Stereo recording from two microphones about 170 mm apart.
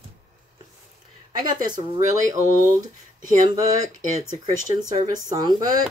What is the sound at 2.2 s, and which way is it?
Speech, 20° right (ahead or behind).